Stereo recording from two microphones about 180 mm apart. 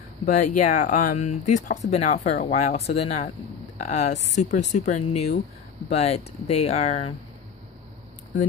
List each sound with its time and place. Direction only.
0.2 s speech: 40° left (ahead or behind)